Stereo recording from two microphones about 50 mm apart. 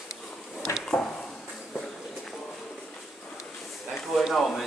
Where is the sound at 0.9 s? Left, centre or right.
Centre.